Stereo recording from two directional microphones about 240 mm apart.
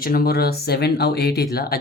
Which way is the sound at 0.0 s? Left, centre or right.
Left.